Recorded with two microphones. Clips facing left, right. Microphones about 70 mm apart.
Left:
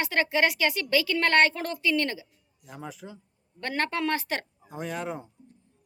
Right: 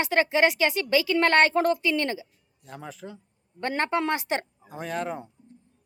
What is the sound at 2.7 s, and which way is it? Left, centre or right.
Speech, centre.